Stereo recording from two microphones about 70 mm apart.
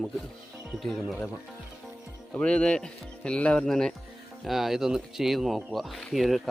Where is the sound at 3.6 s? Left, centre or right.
Centre.